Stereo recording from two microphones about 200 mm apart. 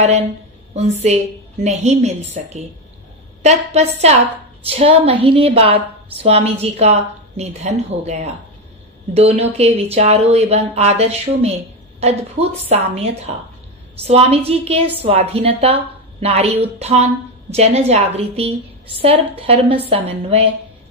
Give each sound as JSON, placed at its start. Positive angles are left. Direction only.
{"t": 0.7, "sound": "a woman's voice", "side_deg": -35}
{"t": 14.0, "sound": "a woman's voice", "side_deg": -30}